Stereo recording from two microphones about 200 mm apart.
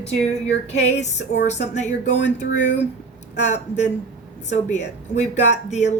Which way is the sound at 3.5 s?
35° left (ahead or behind).